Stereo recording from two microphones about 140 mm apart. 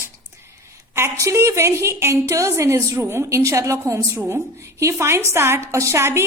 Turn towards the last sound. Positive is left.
turn(degrees=-20)  # may be behind; listen again after turning